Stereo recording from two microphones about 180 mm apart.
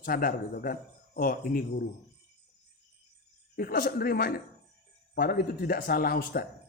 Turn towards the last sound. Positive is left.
turn(degrees=55)  # may be behind; listen again after turning